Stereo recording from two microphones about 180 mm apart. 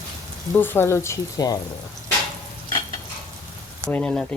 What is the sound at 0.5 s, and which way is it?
Speech, 10° left (ahead or behind).